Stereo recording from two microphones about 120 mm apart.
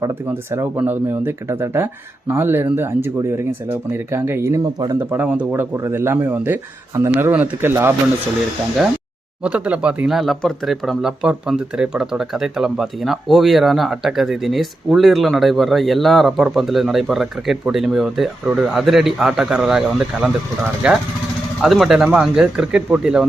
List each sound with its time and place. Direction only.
0.3 s speech: 15° right (ahead or behind)
5.7 s speech: 25° right (ahead or behind)
9.4 s speech: 10° right (ahead or behind)